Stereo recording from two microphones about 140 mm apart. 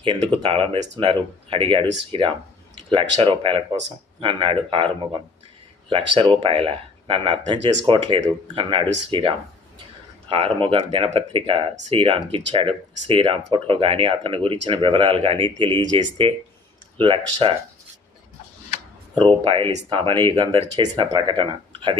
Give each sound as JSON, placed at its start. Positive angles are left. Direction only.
{"t": 0.4, "sound": "speech", "side_deg": -45}
{"t": 10.3, "sound": "speech", "side_deg": -40}
{"t": 19.2, "sound": "speech", "side_deg": -40}